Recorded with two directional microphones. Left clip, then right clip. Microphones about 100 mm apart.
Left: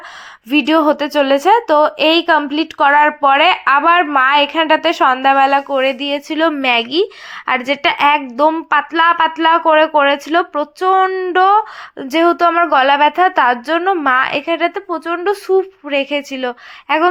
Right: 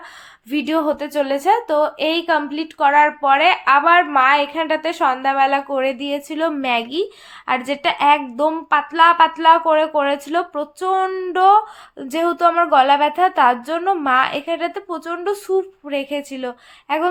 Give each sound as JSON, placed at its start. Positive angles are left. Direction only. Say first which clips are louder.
{"t": 0.5, "sound": "a woman's voice", "louder": "left 7 dB", "side_deg": 40}
{"t": 5.7, "sound": "speech", "louder": "left 5 dB", "side_deg": 15}
{"t": 11.3, "sound": "speech", "louder": "left 1 dB", "side_deg": 25}